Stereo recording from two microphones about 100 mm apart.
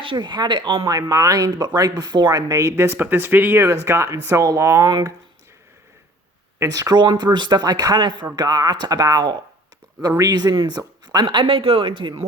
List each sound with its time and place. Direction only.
0.0 s speech: 55° right (ahead or behind)
0.9 s speech: 35° right (ahead or behind)
2.7 s speech: 20° right (ahead or behind)
6.6 s speech: 35° right (ahead or behind); by 12.1 s 55° right (ahead or behind)